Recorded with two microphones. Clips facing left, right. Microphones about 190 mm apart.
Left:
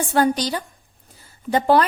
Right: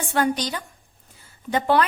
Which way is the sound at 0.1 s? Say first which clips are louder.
Left 3 dB; 35° left (ahead or behind).